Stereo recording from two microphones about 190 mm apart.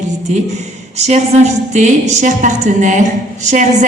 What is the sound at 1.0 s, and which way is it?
A woman's voice, 35° right (ahead or behind).